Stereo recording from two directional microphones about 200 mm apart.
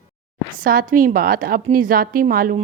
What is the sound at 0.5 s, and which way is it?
A woman's voice, 45° right (ahead or behind).